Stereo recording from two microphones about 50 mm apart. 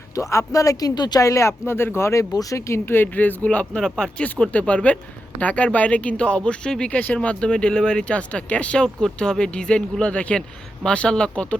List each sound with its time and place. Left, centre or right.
0.2 s speech: left
2.0 s speech: left
3.4 s speech: left
3.8 s speech: centre
4.2 s speech: left